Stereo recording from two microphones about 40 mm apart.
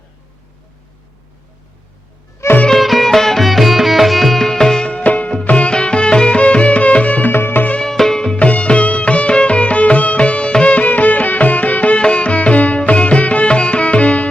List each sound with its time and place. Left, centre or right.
2.7 s music: centre
4.9 s music: left
7.3 s music: left
7.8 s music: centre
8.4 s music: left
10.8 s music: left
12.0 s music: left